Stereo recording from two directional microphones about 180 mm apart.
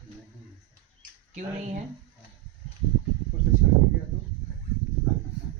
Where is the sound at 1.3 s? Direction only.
40° right (ahead or behind).